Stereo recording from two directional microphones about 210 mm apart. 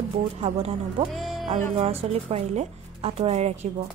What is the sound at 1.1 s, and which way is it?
Music, centre (ahead or behind).